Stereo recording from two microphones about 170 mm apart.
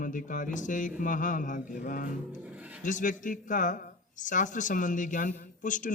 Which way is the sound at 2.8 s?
50° left (ahead or behind).